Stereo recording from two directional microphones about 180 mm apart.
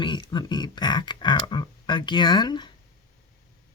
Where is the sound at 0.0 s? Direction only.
25° left (ahead or behind).